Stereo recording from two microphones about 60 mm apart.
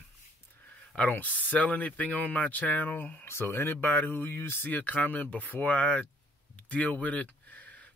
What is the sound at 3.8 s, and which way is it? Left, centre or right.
Speech, left.